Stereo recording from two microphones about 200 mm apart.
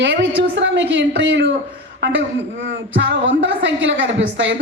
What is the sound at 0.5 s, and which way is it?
A woman's voice, 65° right (ahead or behind).